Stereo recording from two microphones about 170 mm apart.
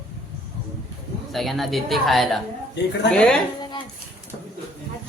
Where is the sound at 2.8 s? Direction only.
75° left (ahead or behind).